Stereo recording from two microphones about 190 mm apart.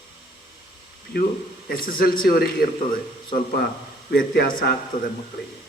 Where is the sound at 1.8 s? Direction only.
50° left (ahead or behind).